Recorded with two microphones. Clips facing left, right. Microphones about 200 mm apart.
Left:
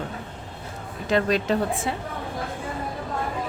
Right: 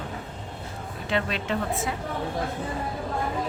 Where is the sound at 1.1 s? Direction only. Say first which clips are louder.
Left 6 dB; 40° left (ahead or behind).